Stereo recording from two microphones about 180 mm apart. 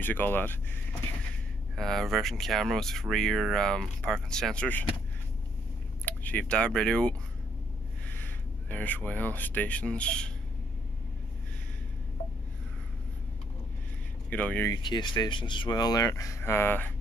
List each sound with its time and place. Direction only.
0.0 s speech: 10° left (ahead or behind)
1.8 s speech: centre (ahead or behind)
6.0 s speech: 10° left (ahead or behind)
14.3 s speech: 10° left (ahead or behind)
14.8 s speech: 25° left (ahead or behind)